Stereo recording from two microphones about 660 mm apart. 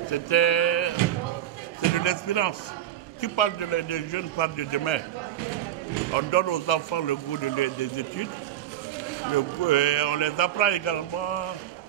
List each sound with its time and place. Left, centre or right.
0.1 s speech: left
6.1 s speech: left
9.3 s speech: left